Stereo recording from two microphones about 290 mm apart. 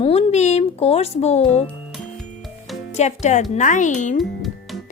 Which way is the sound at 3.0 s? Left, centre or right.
Left.